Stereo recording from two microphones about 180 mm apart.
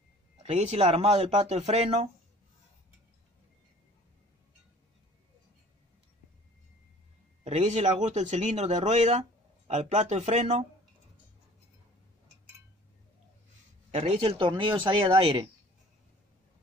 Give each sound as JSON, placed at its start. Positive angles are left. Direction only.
{"t": 0.4, "sound": "speech", "side_deg": -40}
{"t": 7.4, "sound": "speech", "side_deg": -35}
{"t": 13.9, "sound": "speech", "side_deg": -35}